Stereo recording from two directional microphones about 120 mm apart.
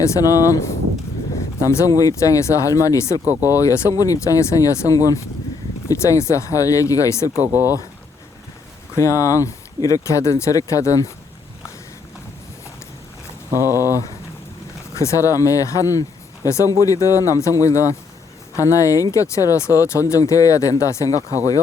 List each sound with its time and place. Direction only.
0.0 s speech: 30° left (ahead or behind)
3.2 s speech: 20° right (ahead or behind)
3.6 s speech: 30° left (ahead or behind)
7.4 s speech: 15° right (ahead or behind)
9.0 s speech: 25° left (ahead or behind)
13.5 s speech: 20° right (ahead or behind)
14.9 s speech: 25° left (ahead or behind)